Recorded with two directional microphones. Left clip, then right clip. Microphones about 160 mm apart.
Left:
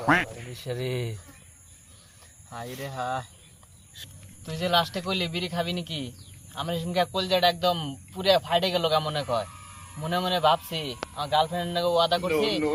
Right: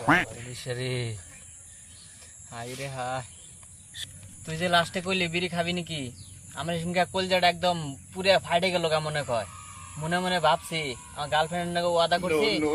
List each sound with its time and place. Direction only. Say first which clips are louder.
0.0 s speech: even; centre (ahead or behind)
2.5 s a man's voice: even; 25° right (ahead or behind)
4.4 s a man's voice: even; 20° right (ahead or behind)
12.2 s speech: even; centre (ahead or behind)